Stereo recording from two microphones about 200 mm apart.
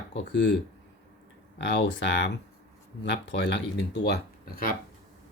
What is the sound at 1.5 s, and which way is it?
Speech, 60° left (ahead or behind).